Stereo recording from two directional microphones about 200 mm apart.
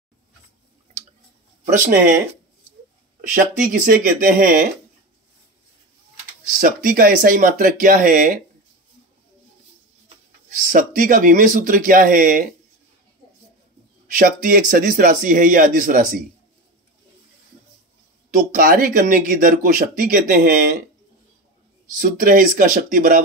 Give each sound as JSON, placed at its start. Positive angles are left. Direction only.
{"t": 1.7, "sound": "speech", "side_deg": -40}
{"t": 3.2, "sound": "speech", "side_deg": -45}
{"t": 6.6, "sound": "speech", "side_deg": -45}
{"t": 10.6, "sound": "speech", "side_deg": -40}
{"t": 14.1, "sound": "speech", "side_deg": -45}
{"t": 18.3, "sound": "speech", "side_deg": -45}
{"t": 21.9, "sound": "speech", "side_deg": -45}